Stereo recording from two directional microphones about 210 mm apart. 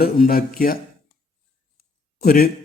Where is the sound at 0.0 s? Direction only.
45° left (ahead or behind).